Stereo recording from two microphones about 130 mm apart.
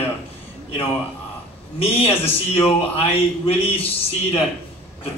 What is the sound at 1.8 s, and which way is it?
A man's voice, 50° left (ahead or behind).